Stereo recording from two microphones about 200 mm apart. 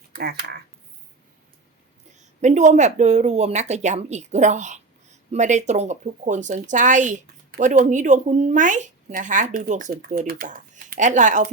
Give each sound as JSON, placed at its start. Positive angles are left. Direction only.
{"t": 0.1, "sound": "speech", "side_deg": -50}
{"t": 2.4, "sound": "speech", "side_deg": -35}